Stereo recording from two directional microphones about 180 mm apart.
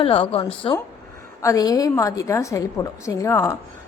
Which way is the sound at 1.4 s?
20° left (ahead or behind).